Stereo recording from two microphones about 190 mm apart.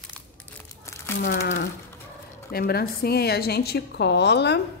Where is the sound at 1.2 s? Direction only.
45° left (ahead or behind); by 4.6 s 65° left (ahead or behind).